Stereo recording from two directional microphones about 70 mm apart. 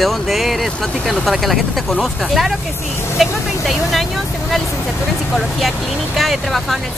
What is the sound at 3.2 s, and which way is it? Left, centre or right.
Speech, centre.